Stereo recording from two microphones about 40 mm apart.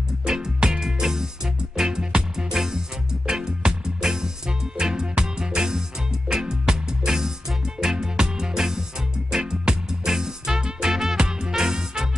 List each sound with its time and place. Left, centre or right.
0.7 s music: centre
11.1 s music: right